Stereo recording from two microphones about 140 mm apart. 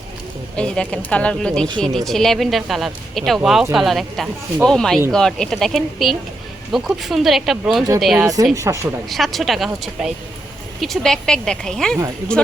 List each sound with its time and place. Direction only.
0.5 s speech: 5° left (ahead or behind)
8.5 s speech: 20° right (ahead or behind)
9.0 s speech: centre (ahead or behind)
10.8 s speech: 5° left (ahead or behind)